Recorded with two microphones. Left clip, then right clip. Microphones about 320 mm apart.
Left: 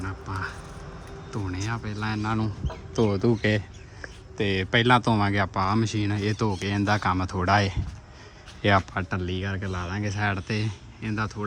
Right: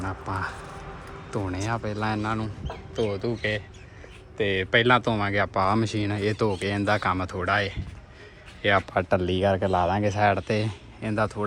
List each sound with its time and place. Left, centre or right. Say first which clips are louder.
0.0 s speech: right 3 dB; centre
2.9 s speech: left 3 dB; left
4.4 s speech: right 2 dB; centre